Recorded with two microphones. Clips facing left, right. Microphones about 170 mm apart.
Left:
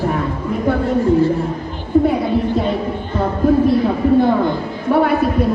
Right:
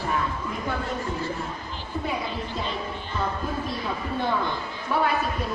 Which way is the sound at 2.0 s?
55° left (ahead or behind).